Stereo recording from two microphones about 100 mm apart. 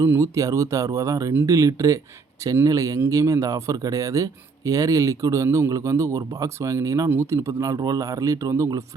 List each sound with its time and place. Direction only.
0.2 s speech: 35° right (ahead or behind)